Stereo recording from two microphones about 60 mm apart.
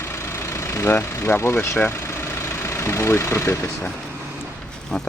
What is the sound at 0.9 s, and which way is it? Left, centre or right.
Speech, left.